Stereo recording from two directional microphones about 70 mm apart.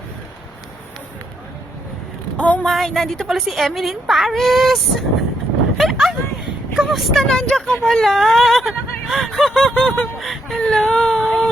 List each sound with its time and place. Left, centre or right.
2.4 s speech: left
2.6 s speech: centre
5.7 s a sound: centre
6.7 s speech: centre